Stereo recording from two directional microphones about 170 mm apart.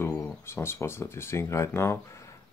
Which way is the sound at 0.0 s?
15° left (ahead or behind).